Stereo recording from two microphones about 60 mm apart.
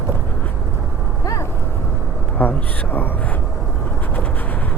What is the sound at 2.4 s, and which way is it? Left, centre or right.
Speech, left.